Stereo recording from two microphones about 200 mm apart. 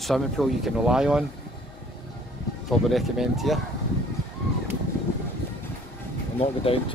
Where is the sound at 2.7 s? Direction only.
Centre (ahead or behind).